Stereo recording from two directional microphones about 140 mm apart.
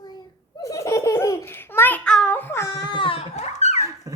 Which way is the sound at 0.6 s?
20° left (ahead or behind).